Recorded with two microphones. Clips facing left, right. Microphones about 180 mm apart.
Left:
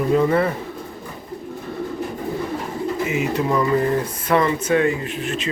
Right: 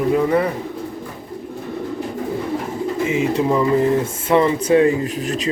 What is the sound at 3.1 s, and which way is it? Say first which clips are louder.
Speech: right 4 dB; 30° right (ahead or behind).